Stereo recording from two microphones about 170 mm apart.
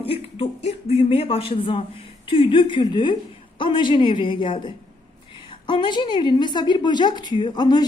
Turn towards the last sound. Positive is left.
turn(degrees=25)  # may be behind; listen again after turning